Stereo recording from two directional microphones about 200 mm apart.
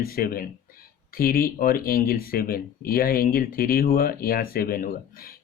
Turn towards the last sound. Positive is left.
turn(degrees=45)  # may be behind; listen again after turning